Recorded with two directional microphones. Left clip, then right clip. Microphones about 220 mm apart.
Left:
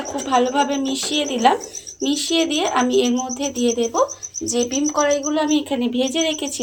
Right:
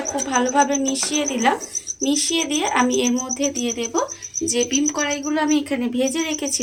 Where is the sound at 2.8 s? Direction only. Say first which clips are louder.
Left 3 dB; 25° right (ahead or behind).